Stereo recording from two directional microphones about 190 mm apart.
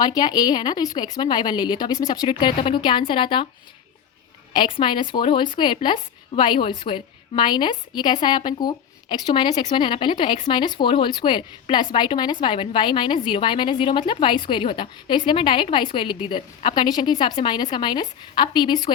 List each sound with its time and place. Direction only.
0.0 s a woman's voice: 20° left (ahead or behind)
4.5 s a woman's voice: 25° left (ahead or behind)